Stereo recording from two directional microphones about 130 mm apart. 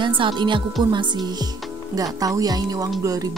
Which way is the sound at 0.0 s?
40° right (ahead or behind).